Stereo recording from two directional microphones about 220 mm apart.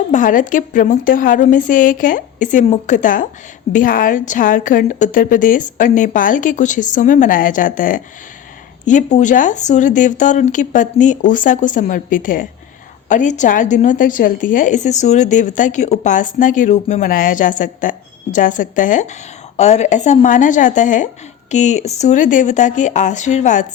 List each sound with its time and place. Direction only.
0.1 s a woman's voice: 35° left (ahead or behind)